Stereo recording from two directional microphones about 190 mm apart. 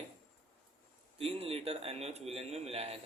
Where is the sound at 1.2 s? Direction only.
30° right (ahead or behind).